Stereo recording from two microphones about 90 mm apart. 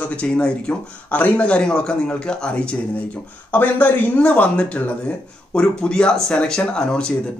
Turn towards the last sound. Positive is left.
turn(degrees=10)  # may be behind; listen again after turning